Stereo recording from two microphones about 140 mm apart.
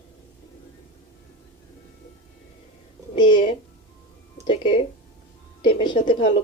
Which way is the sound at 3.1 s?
35° left (ahead or behind).